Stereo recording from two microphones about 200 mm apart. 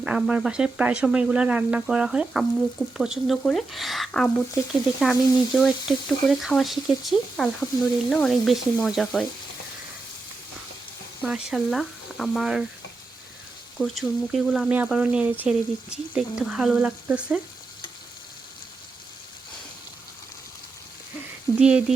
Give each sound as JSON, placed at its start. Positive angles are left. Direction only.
{"t": 0.0, "sound": "speech", "side_deg": -5}
{"t": 11.5, "sound": "speech", "side_deg": 0}
{"t": 13.7, "sound": "speech", "side_deg": 0}
{"t": 21.6, "sound": "speech", "side_deg": -5}